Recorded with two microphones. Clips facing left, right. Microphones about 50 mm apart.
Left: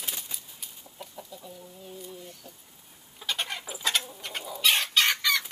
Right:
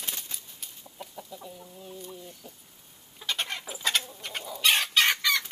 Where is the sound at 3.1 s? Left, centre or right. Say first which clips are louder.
Even; centre.